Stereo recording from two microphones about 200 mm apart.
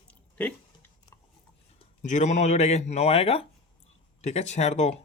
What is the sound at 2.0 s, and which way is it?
Speech, 35° left (ahead or behind).